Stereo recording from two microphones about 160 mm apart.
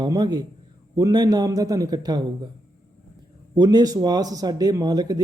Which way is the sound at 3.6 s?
25° right (ahead or behind).